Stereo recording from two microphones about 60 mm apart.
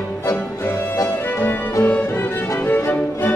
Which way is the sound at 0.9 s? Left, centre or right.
Left.